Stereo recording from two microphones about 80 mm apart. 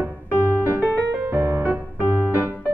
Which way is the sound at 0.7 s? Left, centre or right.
Right.